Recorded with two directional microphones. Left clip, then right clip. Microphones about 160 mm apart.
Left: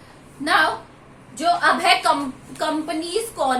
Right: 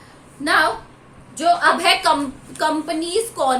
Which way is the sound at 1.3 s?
35° right (ahead or behind).